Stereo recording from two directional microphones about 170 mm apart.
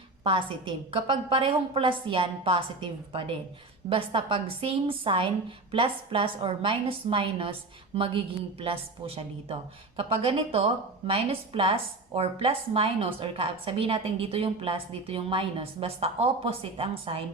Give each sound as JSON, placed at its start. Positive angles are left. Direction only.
{"t": 0.3, "sound": "a woman's voice", "side_deg": -30}